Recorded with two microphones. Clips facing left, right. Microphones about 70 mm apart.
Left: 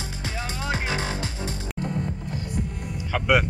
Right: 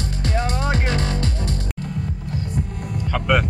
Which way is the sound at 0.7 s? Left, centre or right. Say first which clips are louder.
Right 4 dB; centre.